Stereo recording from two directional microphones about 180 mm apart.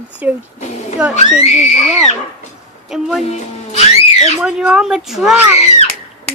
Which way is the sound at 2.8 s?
Centre (ahead or behind).